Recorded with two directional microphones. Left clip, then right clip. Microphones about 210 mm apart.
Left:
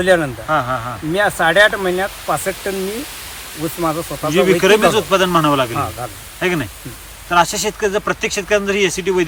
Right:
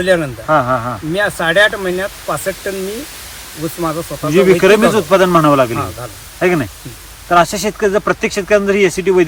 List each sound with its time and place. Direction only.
0.0 s speech: 15° left (ahead or behind)
0.4 s speech: 5° left (ahead or behind)
3.8 s speech: 15° left (ahead or behind)